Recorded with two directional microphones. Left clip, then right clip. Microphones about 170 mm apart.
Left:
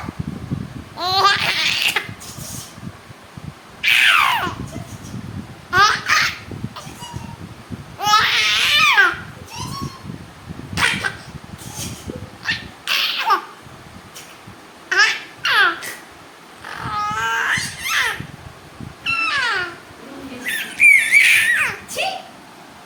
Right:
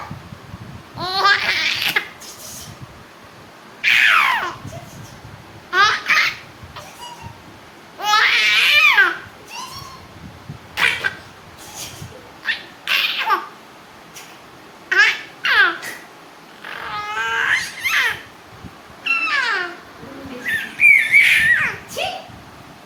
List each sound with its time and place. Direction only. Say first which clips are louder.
0.9 s babbling: left 1 dB; 15° left (ahead or behind)
3.8 s a sound: even; 15° left (ahead or behind)
5.7 s babbling: even; 20° left (ahead or behind)
7.9 s baby cry: even; 10° left (ahead or behind)
11.1 s a sound: right 2 dB; 15° left (ahead or behind)
12.4 s babbling: even; 15° left (ahead or behind)
14.8 s babbling: right 1 dB; 15° left (ahead or behind)
16.6 s cat: left 3 dB; 15° left (ahead or behind)
19.0 s a sound: right 1 dB; 10° left (ahead or behind)
20.4 s dog: left 1 dB; 25° left (ahead or behind)